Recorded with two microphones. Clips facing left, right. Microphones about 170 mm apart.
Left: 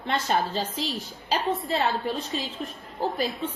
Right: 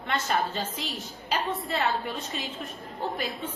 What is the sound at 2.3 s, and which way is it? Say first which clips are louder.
Speech: left 4 dB; 35° left (ahead or behind).